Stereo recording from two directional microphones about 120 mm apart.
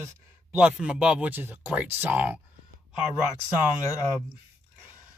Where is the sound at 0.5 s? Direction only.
5° right (ahead or behind).